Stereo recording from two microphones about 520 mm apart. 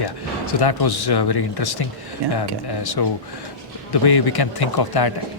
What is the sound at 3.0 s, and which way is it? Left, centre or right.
Speech, left.